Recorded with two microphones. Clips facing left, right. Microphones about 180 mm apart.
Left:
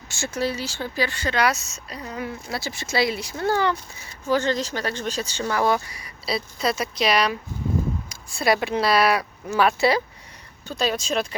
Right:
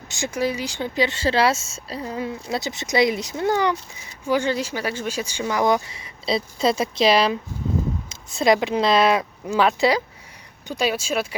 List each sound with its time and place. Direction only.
0.1 s speech: 15° right (ahead or behind)